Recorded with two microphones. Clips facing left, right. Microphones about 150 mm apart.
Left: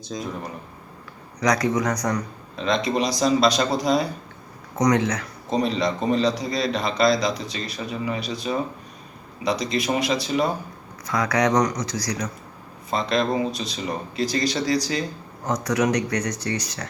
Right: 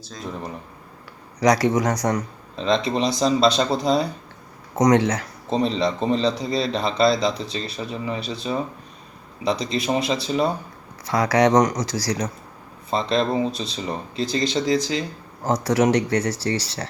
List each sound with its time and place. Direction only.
0.1 s speech: 10° left (ahead or behind)
1.4 s a man's voice: 30° right (ahead or behind)